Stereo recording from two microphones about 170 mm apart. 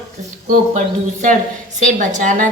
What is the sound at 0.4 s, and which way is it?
Speech, 50° right (ahead or behind).